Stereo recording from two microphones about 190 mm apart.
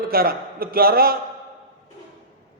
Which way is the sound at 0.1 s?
50° right (ahead or behind).